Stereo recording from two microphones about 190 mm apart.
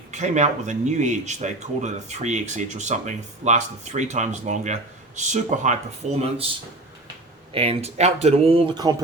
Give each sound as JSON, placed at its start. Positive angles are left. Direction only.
{"t": 0.1, "sound": "speech", "side_deg": -40}
{"t": 7.5, "sound": "speech", "side_deg": -30}